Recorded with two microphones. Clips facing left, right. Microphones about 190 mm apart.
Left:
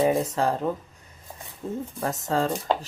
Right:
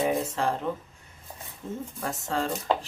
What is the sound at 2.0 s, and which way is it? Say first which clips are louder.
Speech: left 5 dB; 40° left (ahead or behind).